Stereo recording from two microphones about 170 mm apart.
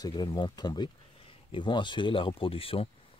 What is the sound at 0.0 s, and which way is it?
Speech, 25° left (ahead or behind).